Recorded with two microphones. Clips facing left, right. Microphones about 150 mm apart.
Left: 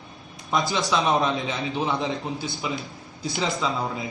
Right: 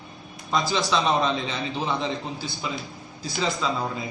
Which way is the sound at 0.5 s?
20° left (ahead or behind).